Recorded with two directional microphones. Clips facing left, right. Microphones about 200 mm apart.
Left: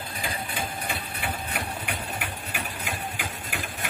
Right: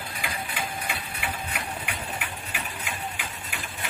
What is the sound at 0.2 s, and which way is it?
Engine, 30° left (ahead or behind).